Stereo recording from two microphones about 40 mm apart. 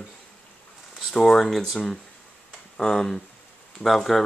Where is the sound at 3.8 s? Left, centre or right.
Centre.